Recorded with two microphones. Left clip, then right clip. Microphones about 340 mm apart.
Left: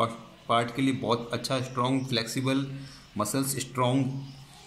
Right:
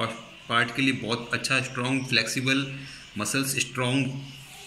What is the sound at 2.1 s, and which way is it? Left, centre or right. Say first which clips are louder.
A man's voice: right 5 dB; left.